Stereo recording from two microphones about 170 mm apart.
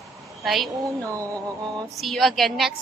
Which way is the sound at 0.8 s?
20° right (ahead or behind).